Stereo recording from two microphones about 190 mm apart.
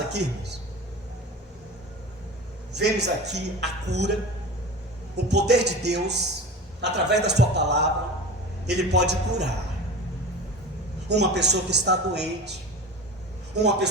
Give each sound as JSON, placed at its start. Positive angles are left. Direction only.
{"t": 0.1, "sound": "speech", "side_deg": -60}
{"t": 2.7, "sound": "speech", "side_deg": -65}
{"t": 5.1, "sound": "speech", "side_deg": -60}
{"t": 11.1, "sound": "speech", "side_deg": -60}
{"t": 13.6, "sound": "speech", "side_deg": -65}